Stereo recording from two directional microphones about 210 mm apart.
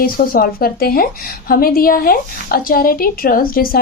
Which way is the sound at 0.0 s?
45° left (ahead or behind).